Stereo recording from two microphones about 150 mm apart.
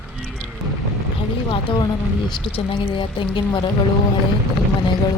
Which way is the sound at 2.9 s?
30° left (ahead or behind).